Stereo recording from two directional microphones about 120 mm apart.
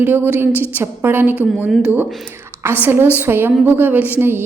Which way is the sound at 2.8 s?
15° right (ahead or behind).